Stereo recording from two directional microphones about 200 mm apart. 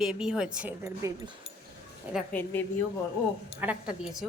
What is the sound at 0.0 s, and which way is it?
Speech, 5° right (ahead or behind).